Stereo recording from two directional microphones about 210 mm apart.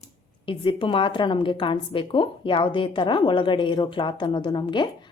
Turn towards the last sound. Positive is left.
turn(degrees=20)  # may be behind; listen again after turning